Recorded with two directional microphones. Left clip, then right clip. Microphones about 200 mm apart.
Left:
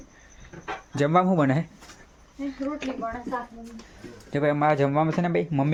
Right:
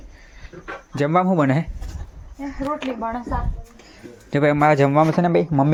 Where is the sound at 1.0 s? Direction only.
15° right (ahead or behind).